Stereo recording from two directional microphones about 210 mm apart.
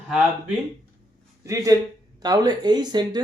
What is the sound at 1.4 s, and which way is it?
A man's voice, 15° right (ahead or behind).